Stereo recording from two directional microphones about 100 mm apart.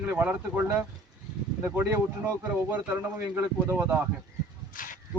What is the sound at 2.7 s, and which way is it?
Speech, 15° right (ahead or behind).